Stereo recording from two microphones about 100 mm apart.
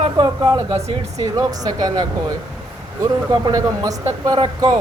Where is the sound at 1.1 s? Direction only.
35° right (ahead or behind).